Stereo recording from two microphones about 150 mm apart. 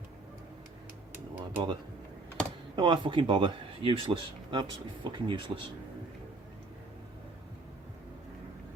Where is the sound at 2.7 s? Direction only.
30° right (ahead or behind).